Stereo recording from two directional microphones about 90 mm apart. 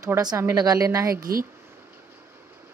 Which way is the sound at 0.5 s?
40° right (ahead or behind).